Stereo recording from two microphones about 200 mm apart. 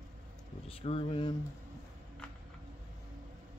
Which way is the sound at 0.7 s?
30° left (ahead or behind).